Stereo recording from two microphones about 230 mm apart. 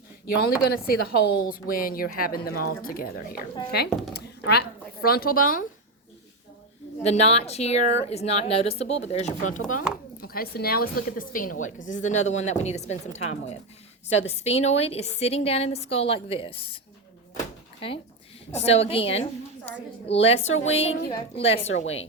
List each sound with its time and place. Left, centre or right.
0.3 s speech: left
4.1 s a sound: left
5.0 s speech: left
7.0 s a woman's voice: left
10.2 s a woman's voice: left
17.3 s door: left
18.5 s a woman's voice: left